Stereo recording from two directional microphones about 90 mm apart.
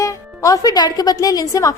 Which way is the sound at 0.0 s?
40° left (ahead or behind).